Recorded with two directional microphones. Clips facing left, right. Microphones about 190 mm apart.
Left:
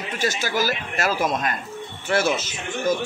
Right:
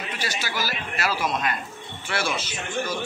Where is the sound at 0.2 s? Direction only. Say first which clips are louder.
Left 7 dB; 45° left (ahead or behind).